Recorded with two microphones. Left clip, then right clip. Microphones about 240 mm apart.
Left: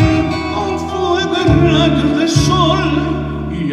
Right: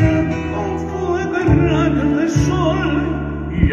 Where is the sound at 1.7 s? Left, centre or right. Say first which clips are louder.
Left 4 dB; left.